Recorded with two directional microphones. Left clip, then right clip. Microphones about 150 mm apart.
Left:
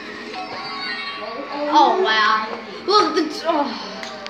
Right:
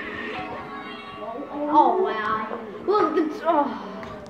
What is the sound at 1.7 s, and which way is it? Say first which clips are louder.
A child's voice: left 4 dB; 55° left (ahead or behind).